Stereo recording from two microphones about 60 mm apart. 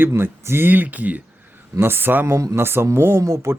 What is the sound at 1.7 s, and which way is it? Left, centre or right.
Speech, right.